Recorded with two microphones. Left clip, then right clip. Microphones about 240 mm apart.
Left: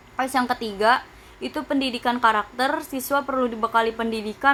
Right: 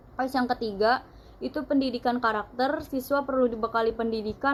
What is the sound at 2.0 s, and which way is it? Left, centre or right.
A woman's voice, left.